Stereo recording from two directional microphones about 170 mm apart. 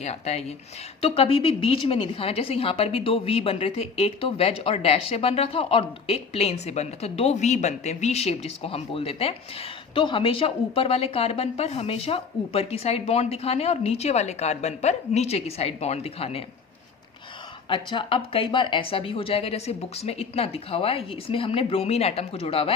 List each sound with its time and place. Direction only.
0.0 s a woman's voice: 40° left (ahead or behind)
17.7 s a woman's voice: 30° left (ahead or behind)